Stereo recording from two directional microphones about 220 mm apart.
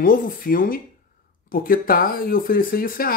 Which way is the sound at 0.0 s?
40° left (ahead or behind).